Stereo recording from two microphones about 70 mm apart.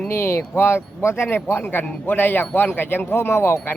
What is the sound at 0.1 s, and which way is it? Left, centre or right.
Speech, left.